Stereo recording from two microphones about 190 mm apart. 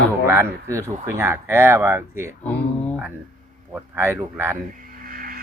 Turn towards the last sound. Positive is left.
turn(degrees=-50)  # may be behind; listen again after turning